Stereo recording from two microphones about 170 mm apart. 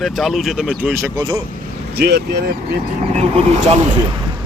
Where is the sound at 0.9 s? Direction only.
15° right (ahead or behind).